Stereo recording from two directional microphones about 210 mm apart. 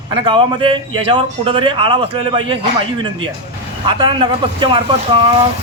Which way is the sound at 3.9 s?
25° right (ahead or behind).